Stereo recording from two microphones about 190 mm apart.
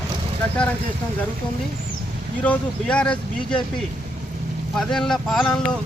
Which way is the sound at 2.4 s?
5° left (ahead or behind).